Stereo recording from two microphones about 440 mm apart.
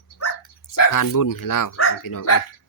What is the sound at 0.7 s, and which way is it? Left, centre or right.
Speech, left.